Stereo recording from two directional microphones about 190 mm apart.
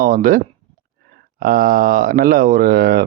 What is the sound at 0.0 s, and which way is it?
Speech, 45° right (ahead or behind).